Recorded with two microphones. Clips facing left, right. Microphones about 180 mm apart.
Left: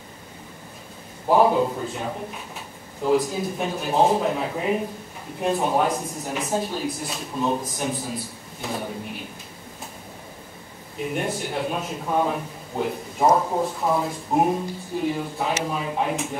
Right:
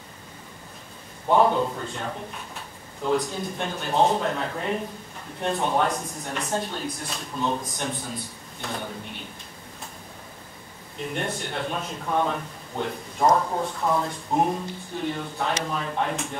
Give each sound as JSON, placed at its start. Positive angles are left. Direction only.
{"t": 1.3, "sound": "a man's voice", "side_deg": 5}
{"t": 11.0, "sound": "a man's voice", "side_deg": 5}